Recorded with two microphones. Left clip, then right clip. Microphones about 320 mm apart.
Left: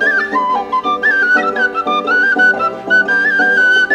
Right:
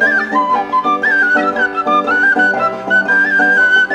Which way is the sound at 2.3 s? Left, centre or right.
Centre.